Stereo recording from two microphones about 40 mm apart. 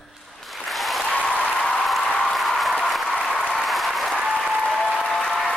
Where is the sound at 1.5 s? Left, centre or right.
Centre.